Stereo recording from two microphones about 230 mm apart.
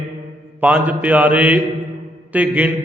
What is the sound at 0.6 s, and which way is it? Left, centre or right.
Mantra, centre.